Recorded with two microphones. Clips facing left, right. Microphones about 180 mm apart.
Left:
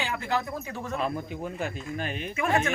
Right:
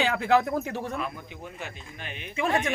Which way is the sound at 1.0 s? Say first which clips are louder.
Left 5 dB; 40° left (ahead or behind).